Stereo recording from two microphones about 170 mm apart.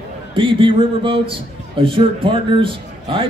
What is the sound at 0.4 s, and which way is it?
A man's voice, 30° right (ahead or behind).